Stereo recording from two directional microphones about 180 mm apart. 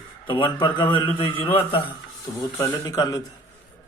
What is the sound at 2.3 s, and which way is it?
Speech, 35° left (ahead or behind).